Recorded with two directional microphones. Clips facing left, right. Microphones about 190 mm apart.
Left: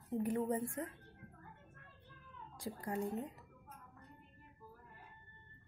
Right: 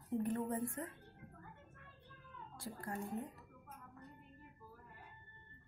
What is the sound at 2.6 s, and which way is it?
Speech, 15° left (ahead or behind).